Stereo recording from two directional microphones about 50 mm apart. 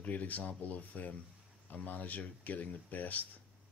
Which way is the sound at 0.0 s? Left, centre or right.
Left.